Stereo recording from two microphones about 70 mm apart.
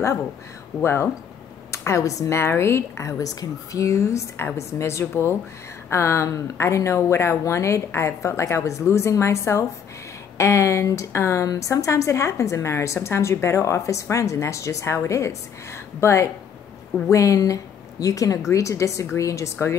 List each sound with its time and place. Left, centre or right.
0.8 s a woman's voice: left
17.1 s speech: left